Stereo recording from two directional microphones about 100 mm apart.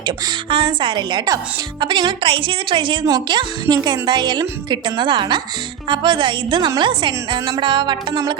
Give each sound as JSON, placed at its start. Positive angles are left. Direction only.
{"t": 0.0, "sound": "a woman's voice", "side_deg": -50}
{"t": 3.1, "sound": "speech", "side_deg": -45}